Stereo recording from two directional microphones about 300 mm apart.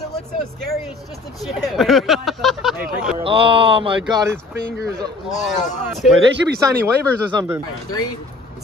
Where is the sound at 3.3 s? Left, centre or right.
Centre.